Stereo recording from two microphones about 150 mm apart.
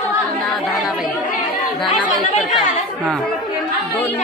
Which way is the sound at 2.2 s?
55° left (ahead or behind).